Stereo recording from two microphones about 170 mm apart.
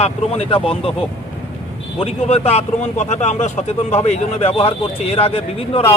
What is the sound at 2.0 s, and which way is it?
Speech, 40° left (ahead or behind).